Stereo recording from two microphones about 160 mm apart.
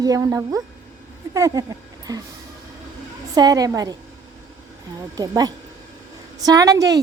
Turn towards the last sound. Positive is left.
turn(degrees=-25)  # may be behind; listen again after turning